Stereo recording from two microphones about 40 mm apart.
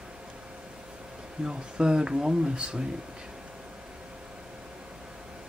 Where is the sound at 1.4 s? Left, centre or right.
Centre.